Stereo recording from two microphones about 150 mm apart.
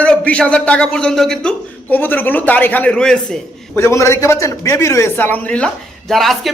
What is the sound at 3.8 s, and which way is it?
A man's voice, 20° left (ahead or behind).